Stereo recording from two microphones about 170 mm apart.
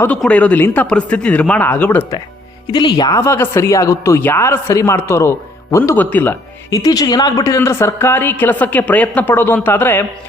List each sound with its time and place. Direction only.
0.2 s speech: 5° left (ahead or behind)
2.7 s speech: 25° left (ahead or behind)